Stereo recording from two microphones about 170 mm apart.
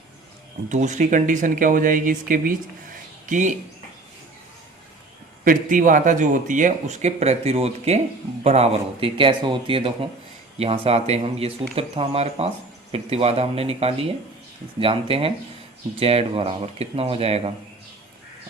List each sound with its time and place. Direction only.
0.7 s speech: 45° right (ahead or behind)
5.5 s speech: 50° right (ahead or behind); by 17.5 s 35° right (ahead or behind)